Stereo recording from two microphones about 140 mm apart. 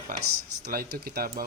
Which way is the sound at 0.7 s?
90° right.